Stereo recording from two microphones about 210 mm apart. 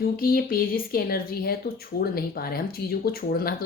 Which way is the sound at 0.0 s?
45° left (ahead or behind).